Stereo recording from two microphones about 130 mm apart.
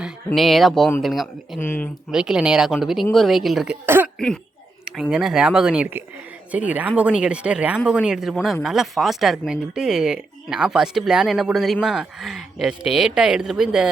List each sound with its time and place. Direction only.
0.3 s speech: centre (ahead or behind)
1.5 s speech: 15° left (ahead or behind)
2.1 s speech: 5° right (ahead or behind)
3.8 s speech: 15° right (ahead or behind)
4.9 s speech: 5° right (ahead or behind)